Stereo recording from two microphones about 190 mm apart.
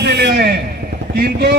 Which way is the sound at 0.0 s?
60° right (ahead or behind).